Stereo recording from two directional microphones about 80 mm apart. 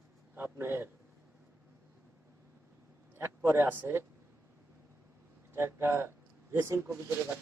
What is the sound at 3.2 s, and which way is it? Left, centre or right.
Speech, right.